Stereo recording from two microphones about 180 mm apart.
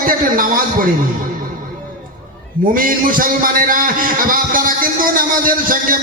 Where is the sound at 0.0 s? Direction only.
50° right (ahead or behind).